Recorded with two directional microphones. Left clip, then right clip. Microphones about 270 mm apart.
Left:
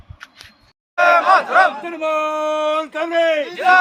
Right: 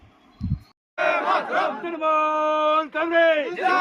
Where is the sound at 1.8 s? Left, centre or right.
Left.